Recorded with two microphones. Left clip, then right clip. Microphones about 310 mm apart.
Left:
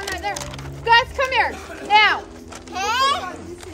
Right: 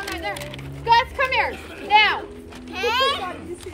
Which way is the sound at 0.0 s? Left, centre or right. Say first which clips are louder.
Left 2 dB; left.